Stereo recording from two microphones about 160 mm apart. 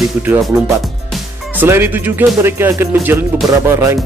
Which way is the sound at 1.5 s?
15° right (ahead or behind).